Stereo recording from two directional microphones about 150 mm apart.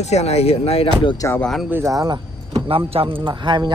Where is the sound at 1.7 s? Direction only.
20° right (ahead or behind).